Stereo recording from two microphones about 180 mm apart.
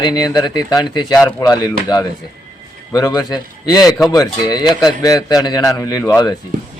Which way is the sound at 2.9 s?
20° left (ahead or behind).